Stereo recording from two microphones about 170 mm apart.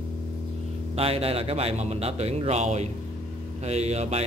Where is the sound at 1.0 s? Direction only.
35° right (ahead or behind).